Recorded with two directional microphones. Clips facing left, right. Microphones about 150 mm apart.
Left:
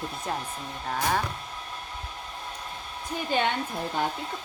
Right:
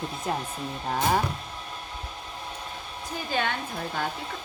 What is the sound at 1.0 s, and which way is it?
Speech, 15° right (ahead or behind).